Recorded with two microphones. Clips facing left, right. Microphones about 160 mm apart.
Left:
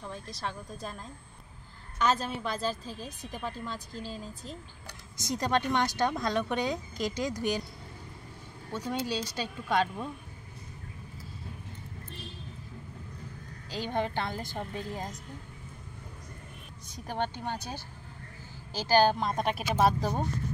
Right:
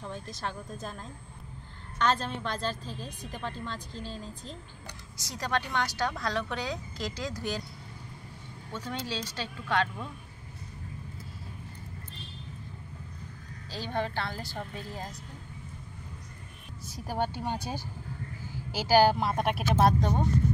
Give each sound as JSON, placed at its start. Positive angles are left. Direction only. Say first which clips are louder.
{"t": 0.0, "sound": "a woman's voice", "louder": "right 1 dB", "side_deg": 0}
{"t": 5.1, "sound": "a woman's voice", "louder": "left 3 dB", "side_deg": 20}
{"t": 8.7, "sound": "a woman's voice", "louder": "left 3 dB", "side_deg": 10}
{"t": 13.7, "sound": "a woman's voice", "louder": "left 1 dB", "side_deg": 15}
{"t": 16.8, "sound": "speech", "louder": "right 2 dB", "side_deg": -5}